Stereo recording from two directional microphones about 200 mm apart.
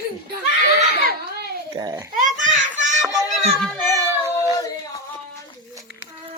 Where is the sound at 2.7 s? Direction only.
40° right (ahead or behind).